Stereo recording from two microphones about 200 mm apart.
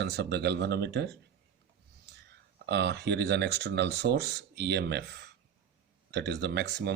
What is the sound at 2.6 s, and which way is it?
Speech, 55° right (ahead or behind).